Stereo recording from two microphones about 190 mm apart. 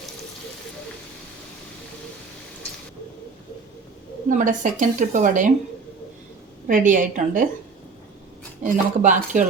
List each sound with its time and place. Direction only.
4.3 s a woman's voice: 45° right (ahead or behind)
6.7 s a woman's voice: 45° right (ahead or behind)
8.6 s speech: 40° right (ahead or behind)